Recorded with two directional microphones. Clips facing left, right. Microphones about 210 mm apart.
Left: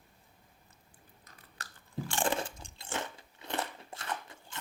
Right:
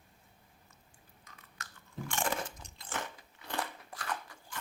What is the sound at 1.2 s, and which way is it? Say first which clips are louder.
Crunch: left 1 dB; 35° left (ahead or behind).